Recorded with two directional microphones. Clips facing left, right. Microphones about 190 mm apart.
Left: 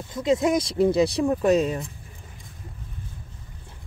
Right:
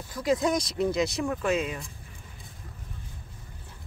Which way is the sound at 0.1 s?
25° left (ahead or behind).